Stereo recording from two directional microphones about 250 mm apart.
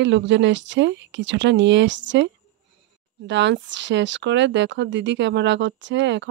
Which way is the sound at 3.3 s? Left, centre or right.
Right.